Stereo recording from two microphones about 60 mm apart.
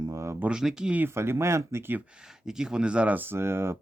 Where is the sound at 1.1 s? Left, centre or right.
Right.